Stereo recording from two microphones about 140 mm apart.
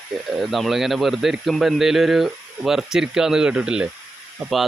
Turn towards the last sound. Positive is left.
turn(degrees=0)  # may be behind; listen again after turning